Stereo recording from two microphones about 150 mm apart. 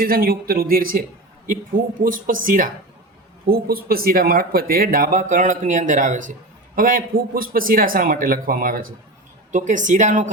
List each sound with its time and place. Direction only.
0.0 s speech: 75° right (ahead or behind)
3.4 s speech: 75° right (ahead or behind)
9.5 s speech: 55° right (ahead or behind)